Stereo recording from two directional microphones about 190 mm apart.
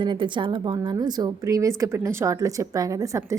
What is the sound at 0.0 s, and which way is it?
A woman's voice, 25° right (ahead or behind).